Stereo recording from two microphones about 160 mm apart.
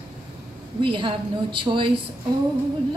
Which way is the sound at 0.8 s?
30° right (ahead or behind).